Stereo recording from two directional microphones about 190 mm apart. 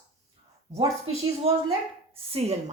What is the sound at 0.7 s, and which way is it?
Speech, 35° right (ahead or behind).